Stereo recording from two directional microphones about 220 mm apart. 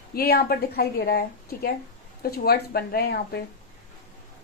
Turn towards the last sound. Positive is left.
turn(degrees=45)  # may be behind; listen again after turning